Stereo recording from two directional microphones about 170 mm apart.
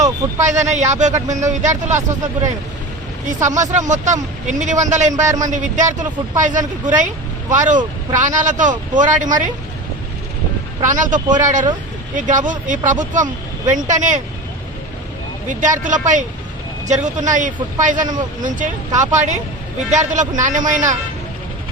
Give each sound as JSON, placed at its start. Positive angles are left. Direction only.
{"t": 0.4, "sound": "speech", "side_deg": -45}
{"t": 3.2, "sound": "speech", "side_deg": -45}
{"t": 10.8, "sound": "speech", "side_deg": -50}
{"t": 15.4, "sound": "speech", "side_deg": -50}